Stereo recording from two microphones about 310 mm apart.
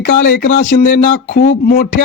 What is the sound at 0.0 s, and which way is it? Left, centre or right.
Speech, left.